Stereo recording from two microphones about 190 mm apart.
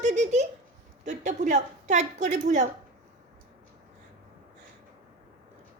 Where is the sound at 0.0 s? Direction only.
35° right (ahead or behind).